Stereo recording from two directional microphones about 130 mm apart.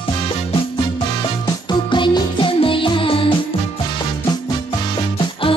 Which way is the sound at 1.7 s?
35° left (ahead or behind).